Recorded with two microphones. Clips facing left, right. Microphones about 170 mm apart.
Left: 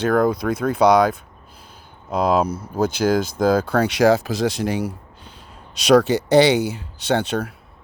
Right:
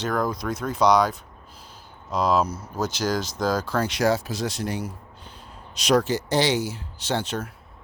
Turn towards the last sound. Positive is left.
turn(degrees=65)  # may be behind; listen again after turning